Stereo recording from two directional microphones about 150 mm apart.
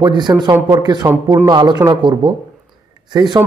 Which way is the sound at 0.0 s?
25° right (ahead or behind).